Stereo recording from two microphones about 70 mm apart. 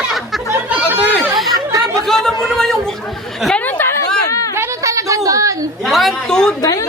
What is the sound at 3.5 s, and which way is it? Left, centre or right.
Speech, left.